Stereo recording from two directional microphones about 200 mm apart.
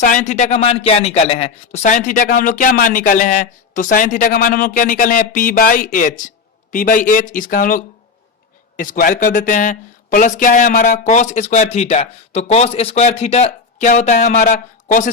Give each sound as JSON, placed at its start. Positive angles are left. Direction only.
{"t": 0.0, "sound": "a man's voice", "side_deg": 40}